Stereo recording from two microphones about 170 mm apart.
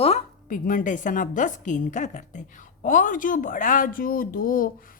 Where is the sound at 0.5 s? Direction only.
55° left (ahead or behind).